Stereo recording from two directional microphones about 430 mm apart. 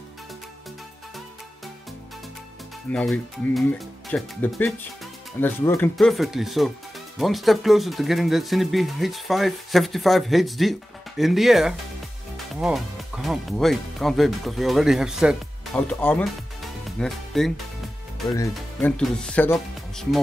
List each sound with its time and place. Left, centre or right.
2.9 s speech: centre